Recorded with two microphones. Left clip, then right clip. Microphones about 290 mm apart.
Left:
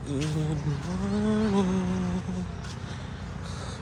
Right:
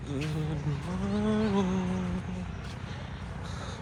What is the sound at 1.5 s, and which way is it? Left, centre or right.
Speech, centre.